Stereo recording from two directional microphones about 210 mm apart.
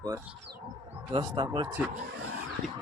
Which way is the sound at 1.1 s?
20° right (ahead or behind).